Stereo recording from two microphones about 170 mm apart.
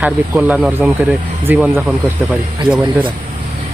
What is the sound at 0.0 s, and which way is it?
Speech, 10° right (ahead or behind).